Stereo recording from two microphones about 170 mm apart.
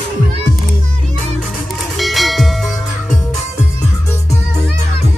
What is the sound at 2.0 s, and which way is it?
Church bell, centre (ahead or behind).